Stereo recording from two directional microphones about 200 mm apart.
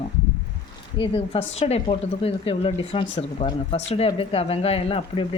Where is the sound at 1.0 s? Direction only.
25° left (ahead or behind).